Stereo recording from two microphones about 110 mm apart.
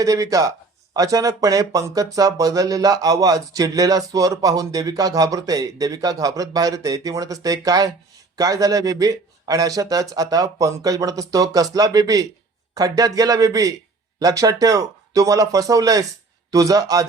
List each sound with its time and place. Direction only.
0.0 s speech: 30° right (ahead or behind)